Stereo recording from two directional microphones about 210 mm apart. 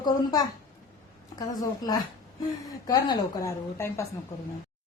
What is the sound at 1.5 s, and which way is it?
Speech, 20° left (ahead or behind).